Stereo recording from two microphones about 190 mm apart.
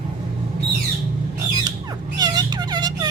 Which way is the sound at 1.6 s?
20° right (ahead or behind).